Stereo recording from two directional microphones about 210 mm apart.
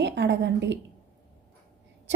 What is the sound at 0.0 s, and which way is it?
Speech, 55° right (ahead or behind).